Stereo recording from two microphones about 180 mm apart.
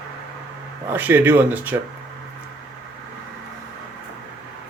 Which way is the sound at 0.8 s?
10° right (ahead or behind).